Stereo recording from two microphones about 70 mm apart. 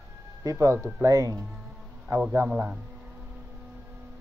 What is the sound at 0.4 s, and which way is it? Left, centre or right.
A man's voice, right.